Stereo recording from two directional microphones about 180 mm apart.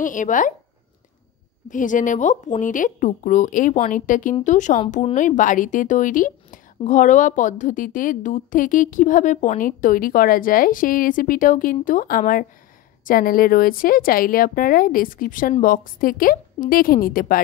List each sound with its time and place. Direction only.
0.0 s a woman's voice: 45° left (ahead or behind)
1.7 s a woman's voice: 45° left (ahead or behind)